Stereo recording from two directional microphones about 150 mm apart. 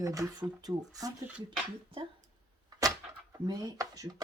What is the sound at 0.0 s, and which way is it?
Speech, 25° right (ahead or behind).